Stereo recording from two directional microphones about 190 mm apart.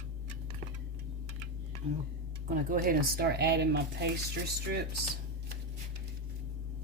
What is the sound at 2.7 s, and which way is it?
Speech, 55° right (ahead or behind).